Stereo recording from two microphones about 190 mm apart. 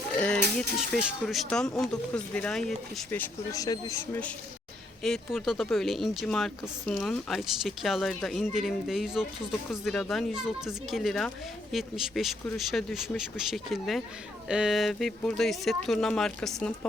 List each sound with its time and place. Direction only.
0.2 s speech: 5° left (ahead or behind)
5.0 s speech: centre (ahead or behind)